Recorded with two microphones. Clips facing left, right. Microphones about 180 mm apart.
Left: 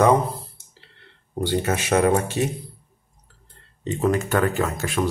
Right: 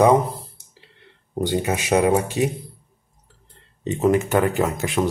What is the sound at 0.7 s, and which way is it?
Speech, 15° right (ahead or behind).